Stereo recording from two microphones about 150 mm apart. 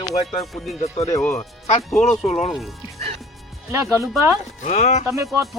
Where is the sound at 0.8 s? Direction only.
45° left (ahead or behind).